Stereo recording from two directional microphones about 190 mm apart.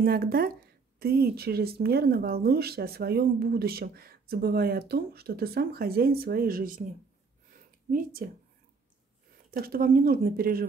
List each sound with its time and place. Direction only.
0.0 s speech: 50° right (ahead or behind)
7.9 s speech: 50° right (ahead or behind)
9.5 s speech: 50° right (ahead or behind)